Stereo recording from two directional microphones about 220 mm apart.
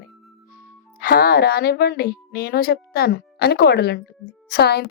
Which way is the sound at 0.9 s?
40° left (ahead or behind).